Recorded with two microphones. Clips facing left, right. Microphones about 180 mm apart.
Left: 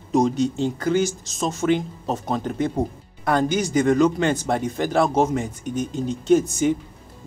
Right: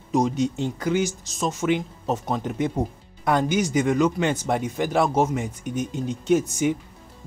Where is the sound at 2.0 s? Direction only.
15° left (ahead or behind).